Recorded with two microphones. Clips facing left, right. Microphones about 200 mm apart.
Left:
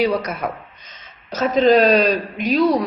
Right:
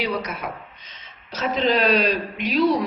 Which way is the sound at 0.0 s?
45° left (ahead or behind).